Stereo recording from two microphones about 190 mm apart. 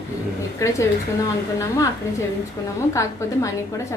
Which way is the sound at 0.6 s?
15° left (ahead or behind).